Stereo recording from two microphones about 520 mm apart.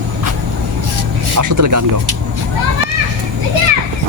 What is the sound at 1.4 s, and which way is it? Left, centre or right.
Speech, right.